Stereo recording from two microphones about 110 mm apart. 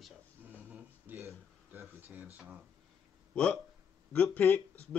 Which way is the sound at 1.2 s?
25° right (ahead or behind).